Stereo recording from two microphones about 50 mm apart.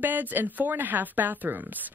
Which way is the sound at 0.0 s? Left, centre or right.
Right.